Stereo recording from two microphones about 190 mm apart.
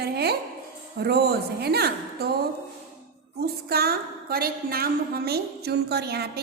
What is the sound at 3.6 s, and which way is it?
A woman's voice, 55° right (ahead or behind).